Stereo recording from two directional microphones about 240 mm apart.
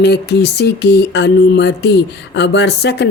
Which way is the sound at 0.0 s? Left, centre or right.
Left.